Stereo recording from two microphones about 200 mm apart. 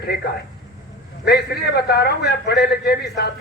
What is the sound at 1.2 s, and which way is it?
A man's voice, 55° left (ahead or behind).